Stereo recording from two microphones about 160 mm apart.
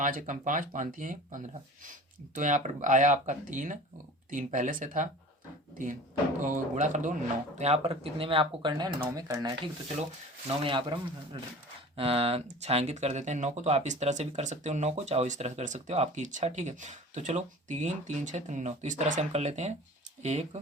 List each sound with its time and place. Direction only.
0.0 s speech: 55° right (ahead or behind)
6.4 s speech: 50° right (ahead or behind)
7.6 s speech: 40° right (ahead or behind); by 9.6 s 25° right (ahead or behind)
10.6 s speech: 30° right (ahead or behind)